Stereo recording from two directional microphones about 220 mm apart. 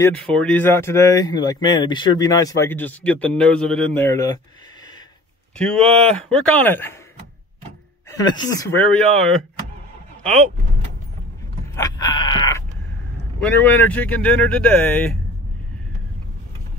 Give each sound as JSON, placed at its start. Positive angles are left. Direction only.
{"t": 0.0, "sound": "speech", "side_deg": 5}
{"t": 5.6, "sound": "speech", "side_deg": 5}
{"t": 8.2, "sound": "speech", "side_deg": 15}
{"t": 11.7, "sound": "a sound", "side_deg": 15}
{"t": 13.4, "sound": "speech", "side_deg": 5}